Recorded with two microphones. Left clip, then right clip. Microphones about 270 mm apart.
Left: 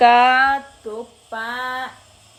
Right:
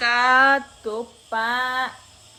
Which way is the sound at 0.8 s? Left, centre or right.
Centre.